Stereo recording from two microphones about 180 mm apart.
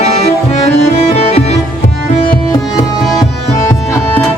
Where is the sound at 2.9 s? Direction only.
Centre (ahead or behind).